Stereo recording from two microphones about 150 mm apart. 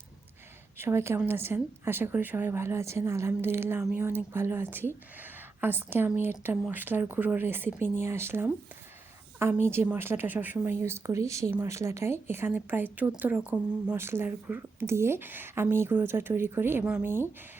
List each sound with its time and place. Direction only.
0.8 s speech: 15° right (ahead or behind)
9.6 s speech: 15° right (ahead or behind)